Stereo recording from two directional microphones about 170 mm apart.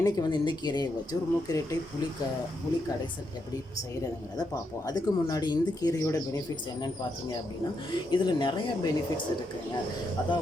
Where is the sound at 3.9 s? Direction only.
20° left (ahead or behind).